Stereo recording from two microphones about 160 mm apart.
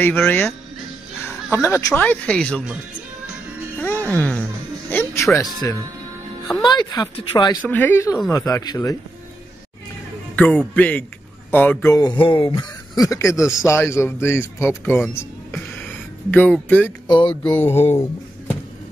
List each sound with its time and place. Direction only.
0.0 s speech: 10° left (ahead or behind)
3.8 s speech: 10° left (ahead or behind)
6.6 s speech: 30° left (ahead or behind)
7.6 s speech: 10° left (ahead or behind)
10.3 s speech: 10° left (ahead or behind)
12.1 s speech: 30° left (ahead or behind); by 14.7 s 15° left (ahead or behind)
14.9 s music: 15° left (ahead or behind)
17.4 s speech: 10° left (ahead or behind)